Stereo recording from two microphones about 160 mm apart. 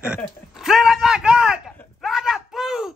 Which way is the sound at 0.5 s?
Centre (ahead or behind).